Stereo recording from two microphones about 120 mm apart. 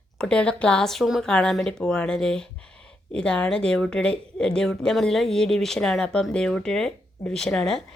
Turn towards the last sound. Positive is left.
turn(degrees=5)  # may be behind; listen again after turning